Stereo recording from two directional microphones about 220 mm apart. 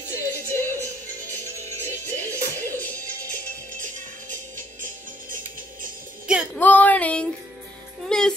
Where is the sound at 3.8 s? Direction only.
35° right (ahead or behind).